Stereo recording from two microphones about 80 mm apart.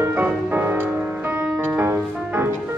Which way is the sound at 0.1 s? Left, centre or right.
Right.